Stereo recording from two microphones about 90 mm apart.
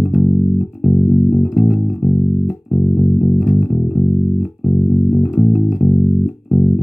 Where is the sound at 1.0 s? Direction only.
5° left (ahead or behind).